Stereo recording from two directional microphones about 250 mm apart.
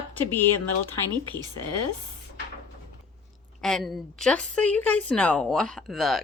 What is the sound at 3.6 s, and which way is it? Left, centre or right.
A woman's voice, centre.